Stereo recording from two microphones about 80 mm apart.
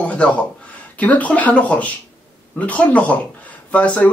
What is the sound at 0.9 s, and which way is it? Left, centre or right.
Speech, centre.